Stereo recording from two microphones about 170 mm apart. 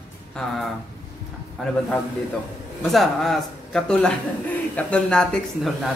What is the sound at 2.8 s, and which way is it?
A man's voice, centre (ahead or behind).